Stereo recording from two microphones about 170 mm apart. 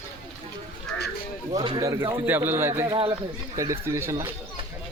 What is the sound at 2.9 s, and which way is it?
Speech, 30° right (ahead or behind).